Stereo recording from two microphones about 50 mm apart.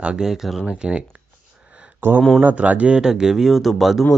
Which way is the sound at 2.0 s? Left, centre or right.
Right.